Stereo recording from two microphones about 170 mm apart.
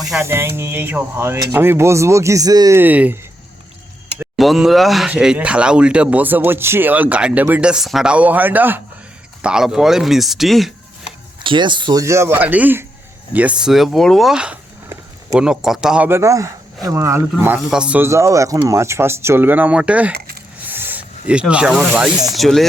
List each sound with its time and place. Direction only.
0.2 s speech: 15° right (ahead or behind)
4.4 s speech: centre (ahead or behind)
11.4 s speech: 25° right (ahead or behind); by 22.6 s centre (ahead or behind)